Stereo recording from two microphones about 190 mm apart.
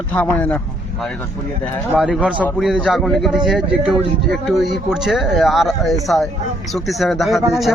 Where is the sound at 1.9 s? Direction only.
5° right (ahead or behind).